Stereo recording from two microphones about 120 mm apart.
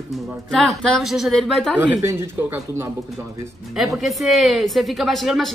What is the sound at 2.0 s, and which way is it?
Speech, 20° right (ahead or behind).